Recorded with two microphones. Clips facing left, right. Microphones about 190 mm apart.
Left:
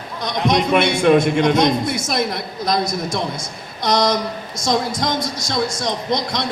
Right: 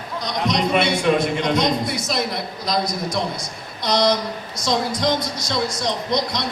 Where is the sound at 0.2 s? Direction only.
55° left (ahead or behind).